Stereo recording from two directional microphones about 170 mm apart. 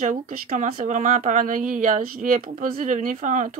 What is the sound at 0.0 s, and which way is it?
Speech, 50° right (ahead or behind).